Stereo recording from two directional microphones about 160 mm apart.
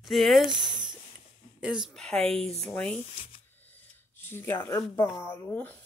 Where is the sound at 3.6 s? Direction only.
10° left (ahead or behind).